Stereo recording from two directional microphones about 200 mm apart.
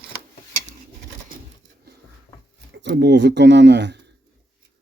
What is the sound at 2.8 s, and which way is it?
Speech, 60° right (ahead or behind).